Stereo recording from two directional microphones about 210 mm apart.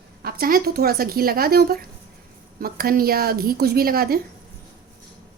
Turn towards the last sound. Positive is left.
turn(degrees=-45)  # may be behind; listen again after turning